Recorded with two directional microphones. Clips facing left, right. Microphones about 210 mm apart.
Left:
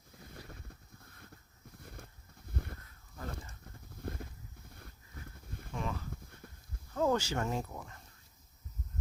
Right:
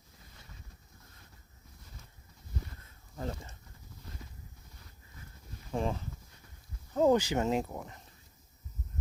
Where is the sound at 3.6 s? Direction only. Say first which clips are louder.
Left 9 dB; 55° left (ahead or behind).